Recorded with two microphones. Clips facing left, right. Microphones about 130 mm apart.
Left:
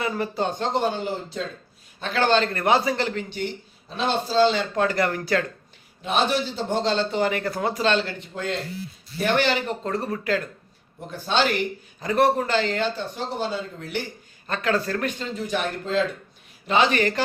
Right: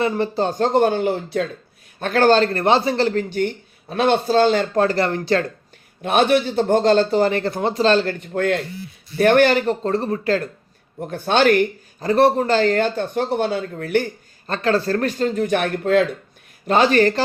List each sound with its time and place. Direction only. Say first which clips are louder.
0.0 s speech: right 5 dB; 30° right (ahead or behind); by 1.5 s 65° right (ahead or behind)
2.0 s a man's voice: right 6 dB; 50° right (ahead or behind); by 5.4 s 30° right (ahead or behind)
6.0 s speech: right 6 dB; 60° right (ahead or behind); by 8.0 s 35° right (ahead or behind)
8.0 s a man's voice: right 9 dB; 55° right (ahead or behind); by 10.5 s 35° right (ahead or behind)
11.0 s speech: right 7 dB; 55° right (ahead or behind)
11.9 s speech: right 5 dB; 35° right (ahead or behind); by 14.1 s 55° right (ahead or behind)
14.4 s speech: right 5 dB; 35° right (ahead or behind); by 16.0 s 65° right (ahead or behind)
16.6 s a man's voice: right 5 dB; 40° right (ahead or behind)